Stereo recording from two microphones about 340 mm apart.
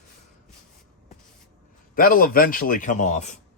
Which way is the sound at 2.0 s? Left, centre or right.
Left.